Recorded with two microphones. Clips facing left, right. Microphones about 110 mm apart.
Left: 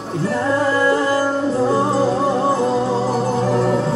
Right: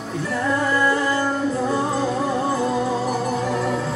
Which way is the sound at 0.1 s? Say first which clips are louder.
Left 4 dB; 35° left (ahead or behind).